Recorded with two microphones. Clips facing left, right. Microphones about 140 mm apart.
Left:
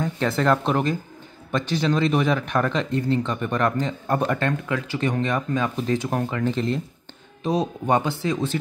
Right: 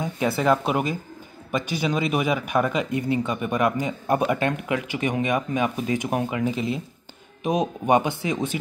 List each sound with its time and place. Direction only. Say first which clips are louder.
0.0 s speech: left 1 dB; 10° right (ahead or behind)